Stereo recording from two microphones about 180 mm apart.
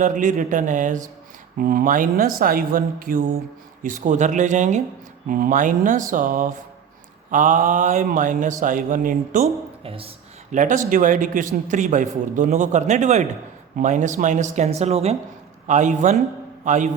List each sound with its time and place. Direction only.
0.0 s speech: 45° right (ahead or behind)
9.8 s speech: 30° right (ahead or behind)
10.5 s speech: 45° right (ahead or behind)